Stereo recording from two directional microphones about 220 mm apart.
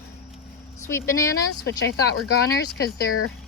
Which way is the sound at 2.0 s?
45° left (ahead or behind).